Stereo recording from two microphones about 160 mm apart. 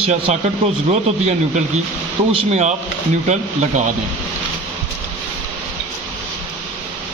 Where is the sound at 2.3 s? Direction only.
45° right (ahead or behind).